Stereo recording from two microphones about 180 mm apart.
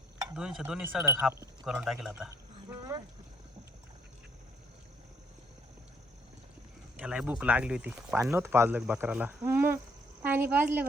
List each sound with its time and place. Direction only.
0.3 s speech: 5° right (ahead or behind)
1.6 s speech: centre (ahead or behind)
2.6 s a sound: 20° right (ahead or behind)
6.9 s speech: 5° right (ahead or behind)